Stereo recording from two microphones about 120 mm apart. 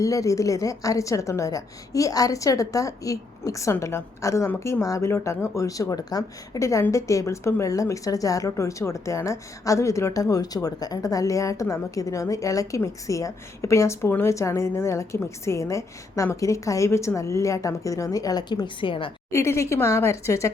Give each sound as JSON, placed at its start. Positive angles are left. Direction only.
{"t": 0.0, "sound": "a woman's voice", "side_deg": 25}
{"t": 19.3, "sound": "a woman's voice", "side_deg": 25}